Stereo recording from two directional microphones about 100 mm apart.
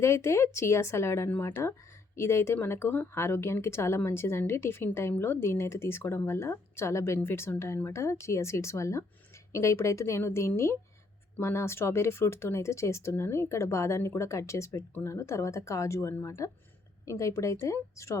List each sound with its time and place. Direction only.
0.0 s speech: 30° left (ahead or behind)